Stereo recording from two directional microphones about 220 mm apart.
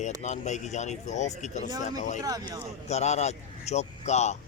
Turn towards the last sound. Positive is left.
turn(degrees=30)  # may be behind; listen again after turning